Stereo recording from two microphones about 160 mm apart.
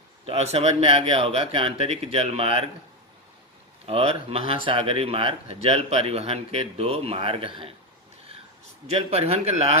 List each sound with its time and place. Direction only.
0.3 s speech: 40° right (ahead or behind)
3.8 s speech: 35° right (ahead or behind)
8.9 s speech: 40° right (ahead or behind)